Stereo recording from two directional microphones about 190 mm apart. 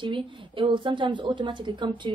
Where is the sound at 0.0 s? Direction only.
25° right (ahead or behind).